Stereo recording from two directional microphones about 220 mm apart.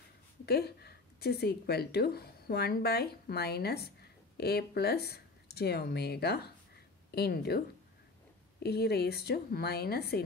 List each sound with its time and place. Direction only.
0.5 s a woman's voice: 45° left (ahead or behind)